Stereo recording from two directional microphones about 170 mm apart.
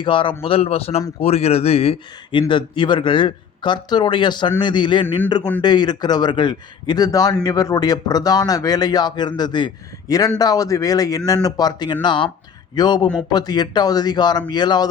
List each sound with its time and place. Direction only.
0.0 s speech: 30° left (ahead or behind)